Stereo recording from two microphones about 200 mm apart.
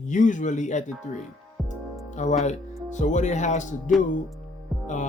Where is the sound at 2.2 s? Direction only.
35° left (ahead or behind).